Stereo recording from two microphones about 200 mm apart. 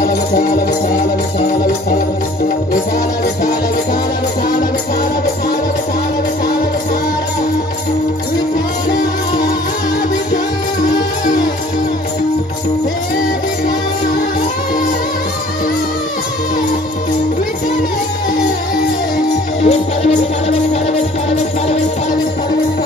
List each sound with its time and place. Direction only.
19.6 s music: 30° left (ahead or behind)